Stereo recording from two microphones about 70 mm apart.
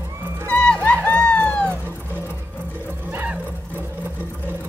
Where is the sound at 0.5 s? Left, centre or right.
Centre.